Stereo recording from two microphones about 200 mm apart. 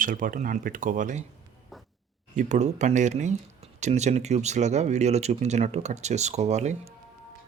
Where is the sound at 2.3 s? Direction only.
35° right (ahead or behind).